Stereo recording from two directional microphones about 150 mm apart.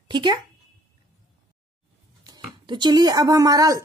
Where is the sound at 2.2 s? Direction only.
30° right (ahead or behind).